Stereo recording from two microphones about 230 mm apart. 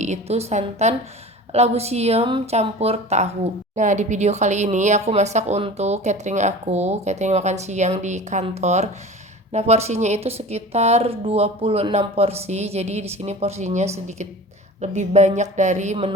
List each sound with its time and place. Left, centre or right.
0.0 s a woman's voice: right